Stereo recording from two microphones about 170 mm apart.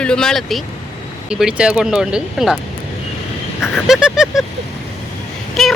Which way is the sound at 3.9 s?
5° right (ahead or behind).